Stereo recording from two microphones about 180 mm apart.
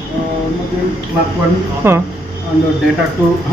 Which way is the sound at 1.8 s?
15° right (ahead or behind).